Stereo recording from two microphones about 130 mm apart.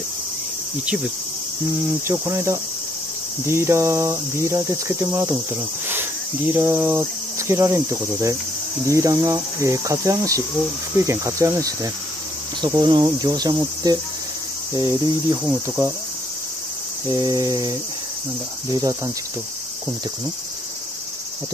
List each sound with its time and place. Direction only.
2.0 s cricket: 20° right (ahead or behind)
6.5 s cricket: 15° right (ahead or behind); by 15.3 s 35° right (ahead or behind)
15.4 s cricket: 10° right (ahead or behind)
17.1 s cricket: 25° right (ahead or behind)